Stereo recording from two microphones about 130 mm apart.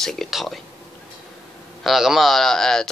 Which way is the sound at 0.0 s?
Centre (ahead or behind).